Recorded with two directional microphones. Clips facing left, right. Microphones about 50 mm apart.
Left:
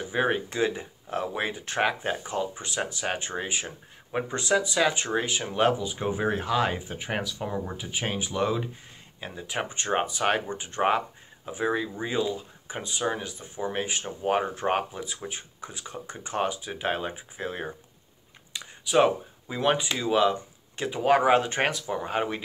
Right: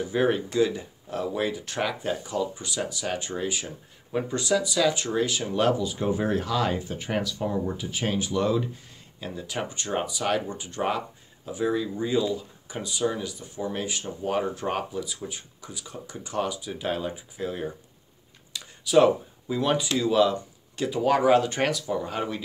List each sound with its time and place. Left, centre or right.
0.1 s speech: left
18.5 s speech: left